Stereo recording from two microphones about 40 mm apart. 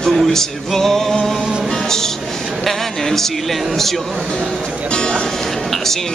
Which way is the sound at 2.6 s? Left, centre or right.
Centre.